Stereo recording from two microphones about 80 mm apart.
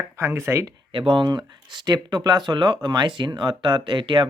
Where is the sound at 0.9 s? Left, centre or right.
Right.